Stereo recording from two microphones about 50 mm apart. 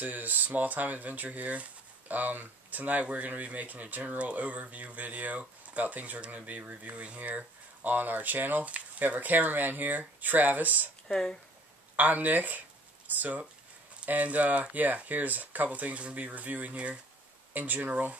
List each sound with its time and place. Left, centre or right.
0.0 s speech: right
11.1 s speech: centre
12.0 s speech: right
17.6 s speech: right